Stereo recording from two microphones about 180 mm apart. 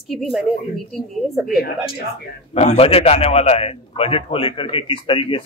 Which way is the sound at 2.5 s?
35° left (ahead or behind).